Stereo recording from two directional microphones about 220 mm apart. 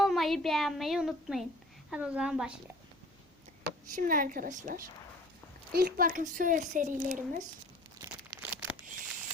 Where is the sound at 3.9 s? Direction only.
40° right (ahead or behind).